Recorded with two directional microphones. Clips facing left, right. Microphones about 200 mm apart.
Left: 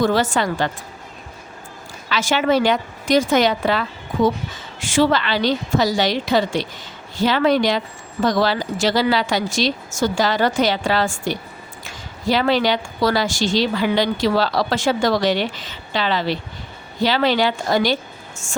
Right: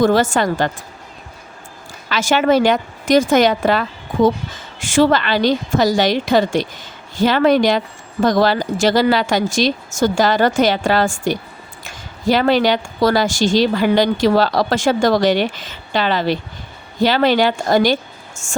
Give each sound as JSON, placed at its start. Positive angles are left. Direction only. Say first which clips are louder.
{"t": 0.0, "sound": "a woman's voice", "louder": "right 4 dB", "side_deg": -45}
{"t": 2.0, "sound": "a woman's voice", "louder": "right 3 dB", "side_deg": -45}